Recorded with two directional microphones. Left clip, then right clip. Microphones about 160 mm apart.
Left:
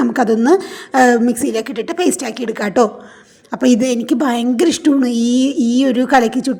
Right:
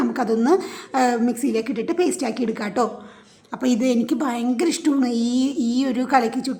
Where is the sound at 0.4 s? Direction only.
30° left (ahead or behind).